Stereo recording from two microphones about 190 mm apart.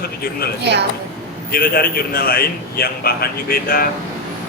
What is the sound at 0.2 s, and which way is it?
Speech, 55° left (ahead or behind).